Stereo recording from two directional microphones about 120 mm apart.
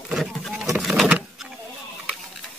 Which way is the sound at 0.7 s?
5° right (ahead or behind).